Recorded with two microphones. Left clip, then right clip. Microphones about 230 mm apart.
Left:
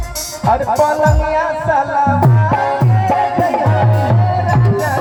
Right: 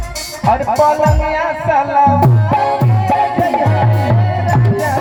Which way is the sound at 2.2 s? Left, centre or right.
Right.